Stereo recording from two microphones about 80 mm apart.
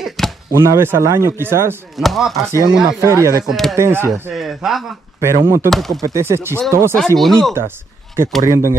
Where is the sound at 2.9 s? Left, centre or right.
Right.